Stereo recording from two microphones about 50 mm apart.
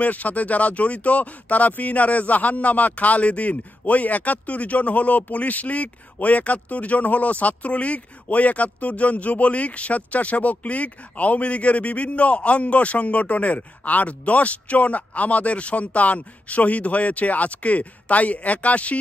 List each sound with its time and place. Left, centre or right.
0.0 s speech: left